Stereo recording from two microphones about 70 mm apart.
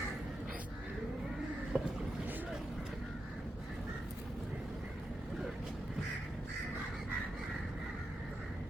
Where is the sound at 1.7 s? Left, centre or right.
Centre.